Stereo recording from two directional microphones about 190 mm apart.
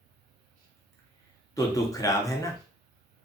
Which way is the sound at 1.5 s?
15° left (ahead or behind).